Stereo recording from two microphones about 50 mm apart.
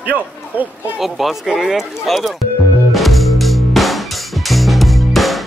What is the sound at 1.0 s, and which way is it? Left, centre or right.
Speech, centre.